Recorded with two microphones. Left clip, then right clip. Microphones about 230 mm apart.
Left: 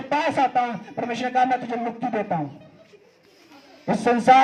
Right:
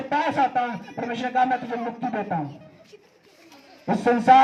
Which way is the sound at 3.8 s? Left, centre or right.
Left.